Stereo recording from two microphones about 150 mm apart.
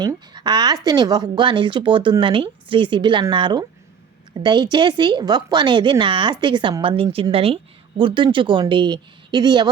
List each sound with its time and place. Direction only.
0.0 s speech: 30° right (ahead or behind)